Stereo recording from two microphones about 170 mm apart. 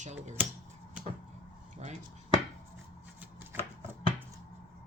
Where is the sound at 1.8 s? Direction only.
40° right (ahead or behind).